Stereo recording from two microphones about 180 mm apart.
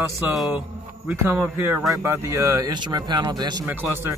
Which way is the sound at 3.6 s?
10° right (ahead or behind).